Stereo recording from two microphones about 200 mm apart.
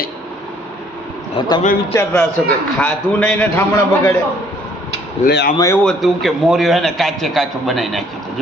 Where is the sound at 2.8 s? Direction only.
5° left (ahead or behind).